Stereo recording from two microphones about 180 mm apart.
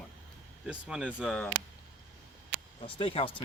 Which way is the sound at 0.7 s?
5° right (ahead or behind).